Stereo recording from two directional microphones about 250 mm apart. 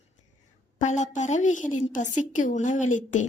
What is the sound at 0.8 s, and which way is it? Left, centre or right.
A woman's voice, left.